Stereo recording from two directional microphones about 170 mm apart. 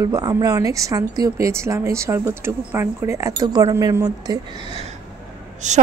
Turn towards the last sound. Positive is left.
turn(degrees=-45)  # may be behind; listen again after turning